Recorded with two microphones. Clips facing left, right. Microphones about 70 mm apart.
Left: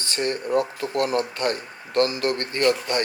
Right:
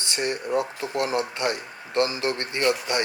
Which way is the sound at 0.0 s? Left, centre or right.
Centre.